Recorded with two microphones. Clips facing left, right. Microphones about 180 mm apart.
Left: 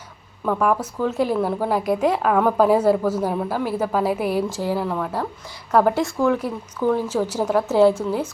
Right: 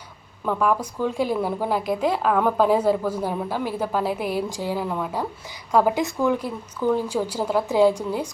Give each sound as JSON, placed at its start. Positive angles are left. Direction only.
{"t": 0.4, "sound": "a woman's voice", "side_deg": 0}
{"t": 1.8, "sound": "a woman's voice", "side_deg": 10}
{"t": 4.4, "sound": "a woman's voice", "side_deg": -15}
{"t": 6.9, "sound": "speech", "side_deg": -10}